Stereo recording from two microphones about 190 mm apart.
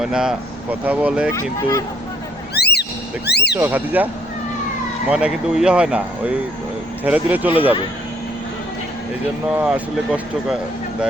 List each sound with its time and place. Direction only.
0.0 s speech: 5° right (ahead or behind)
1.3 s speech: 15° left (ahead or behind)
2.6 s a sound: 60° left (ahead or behind)
3.2 s speech: 60° left (ahead or behind)
3.5 s speech: 10° right (ahead or behind)
9.6 s speech: 5° right (ahead or behind)